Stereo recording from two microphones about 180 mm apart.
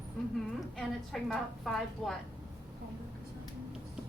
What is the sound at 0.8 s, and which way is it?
A woman's voice, centre (ahead or behind).